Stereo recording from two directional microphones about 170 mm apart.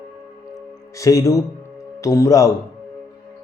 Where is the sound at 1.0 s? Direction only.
20° left (ahead or behind).